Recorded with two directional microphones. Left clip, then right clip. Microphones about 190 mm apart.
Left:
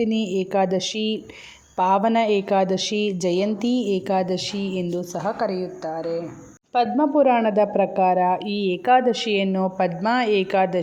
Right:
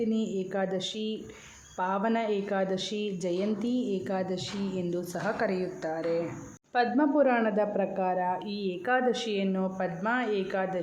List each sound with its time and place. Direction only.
0.0 s a woman's voice: 25° left (ahead or behind)
5.2 s a woman's voice: 15° left (ahead or behind); by 10.8 s 35° left (ahead or behind)